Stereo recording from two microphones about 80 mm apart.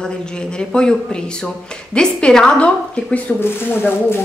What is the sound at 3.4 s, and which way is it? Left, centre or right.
Speech, left.